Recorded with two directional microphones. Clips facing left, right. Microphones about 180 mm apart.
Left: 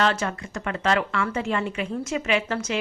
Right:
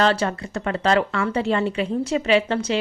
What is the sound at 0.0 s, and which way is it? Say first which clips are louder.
A woman's voice: right 4 dB; 35° right (ahead or behind).